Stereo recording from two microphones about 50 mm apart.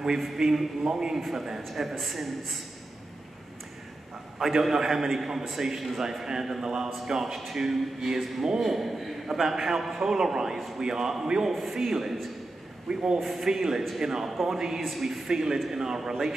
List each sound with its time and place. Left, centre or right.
0.2 s a man's voice: centre
4.4 s a man's voice: centre
12.8 s a man's voice: centre
13.2 s a man's voice: centre